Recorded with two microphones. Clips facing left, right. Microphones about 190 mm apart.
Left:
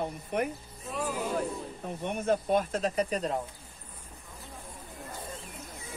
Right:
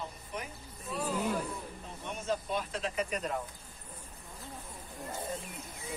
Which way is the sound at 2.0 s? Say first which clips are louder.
Left 7 dB; 60° left (ahead or behind).